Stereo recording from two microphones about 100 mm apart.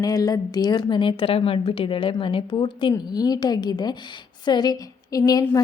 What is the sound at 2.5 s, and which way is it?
A woman's voice, 50° left (ahead or behind).